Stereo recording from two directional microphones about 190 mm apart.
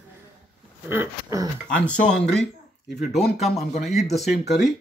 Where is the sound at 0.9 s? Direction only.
15° right (ahead or behind).